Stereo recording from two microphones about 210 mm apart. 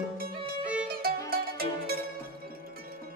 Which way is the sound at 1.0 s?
45° right (ahead or behind).